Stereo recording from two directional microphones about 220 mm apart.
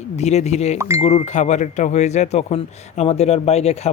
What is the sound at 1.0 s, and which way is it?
Speech, 30° left (ahead or behind).